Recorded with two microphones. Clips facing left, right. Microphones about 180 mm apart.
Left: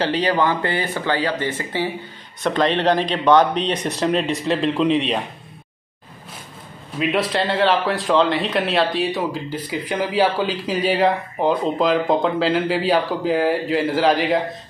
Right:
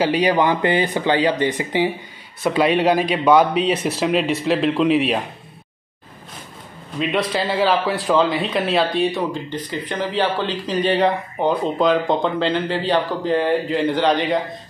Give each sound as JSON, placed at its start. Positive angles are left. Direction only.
{"t": 0.0, "sound": "speech", "side_deg": -10}
{"t": 7.0, "sound": "speech", "side_deg": 0}